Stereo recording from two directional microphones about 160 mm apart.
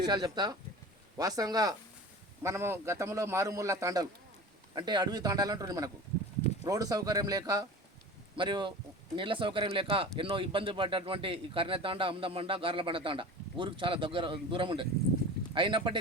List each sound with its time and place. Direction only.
0.0 s a man's voice: 25° right (ahead or behind)